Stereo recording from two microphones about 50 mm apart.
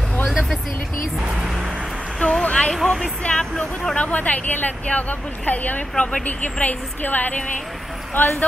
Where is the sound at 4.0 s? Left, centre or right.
Left.